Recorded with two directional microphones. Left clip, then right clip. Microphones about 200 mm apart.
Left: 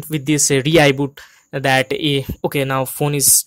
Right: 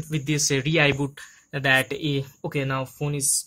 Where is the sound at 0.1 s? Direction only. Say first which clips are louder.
Left 8 dB; 50° left (ahead or behind).